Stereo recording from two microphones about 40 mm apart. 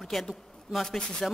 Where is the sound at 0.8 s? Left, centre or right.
Centre.